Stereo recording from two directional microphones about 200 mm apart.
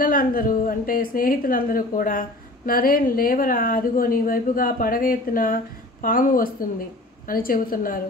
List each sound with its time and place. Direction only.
0.0 s a woman's voice: 45° left (ahead or behind)